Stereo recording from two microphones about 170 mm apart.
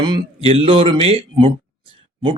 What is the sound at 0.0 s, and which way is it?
A woman's voice, 30° right (ahead or behind).